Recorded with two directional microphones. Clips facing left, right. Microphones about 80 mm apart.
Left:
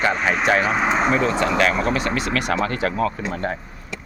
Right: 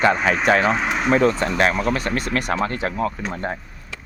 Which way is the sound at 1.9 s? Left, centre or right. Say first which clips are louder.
Left 1 dB; right.